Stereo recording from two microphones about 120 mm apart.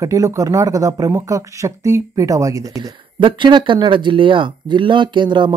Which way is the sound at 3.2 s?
40° right (ahead or behind).